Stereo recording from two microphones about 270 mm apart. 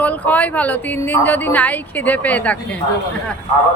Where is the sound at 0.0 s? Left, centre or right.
Centre.